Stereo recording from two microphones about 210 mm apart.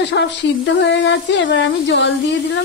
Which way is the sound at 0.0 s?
55° left (ahead or behind).